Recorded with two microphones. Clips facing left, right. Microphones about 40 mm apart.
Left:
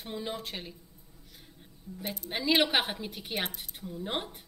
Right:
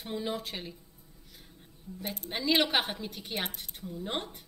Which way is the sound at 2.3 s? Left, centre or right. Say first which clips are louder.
Left 1 dB; centre.